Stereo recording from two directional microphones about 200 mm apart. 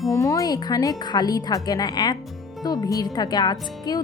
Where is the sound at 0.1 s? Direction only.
15° left (ahead or behind).